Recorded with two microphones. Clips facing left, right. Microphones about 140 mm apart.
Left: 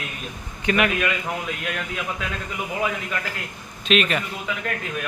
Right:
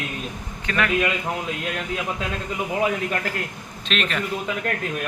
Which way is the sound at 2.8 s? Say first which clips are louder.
Right 3 dB; 40° right (ahead or behind).